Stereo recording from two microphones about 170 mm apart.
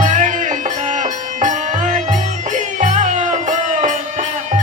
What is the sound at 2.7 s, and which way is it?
Music, 45° right (ahead or behind).